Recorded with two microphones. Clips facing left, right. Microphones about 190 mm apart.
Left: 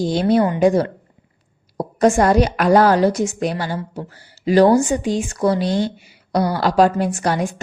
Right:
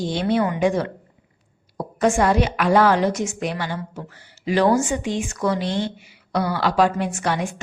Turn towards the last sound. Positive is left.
turn(degrees=35)  # may be behind; listen again after turning